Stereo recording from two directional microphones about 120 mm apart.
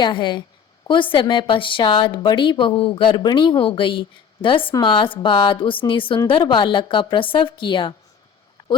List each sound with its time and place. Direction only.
0.0 s a woman's voice: 40° left (ahead or behind)